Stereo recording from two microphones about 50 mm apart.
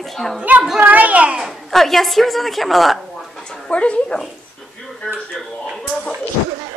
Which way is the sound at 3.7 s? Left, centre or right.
Left.